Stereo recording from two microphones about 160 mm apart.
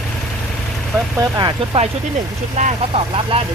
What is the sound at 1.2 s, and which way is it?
Speech, 25° right (ahead or behind).